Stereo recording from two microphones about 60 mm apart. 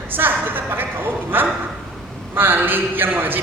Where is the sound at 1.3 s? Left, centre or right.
Right.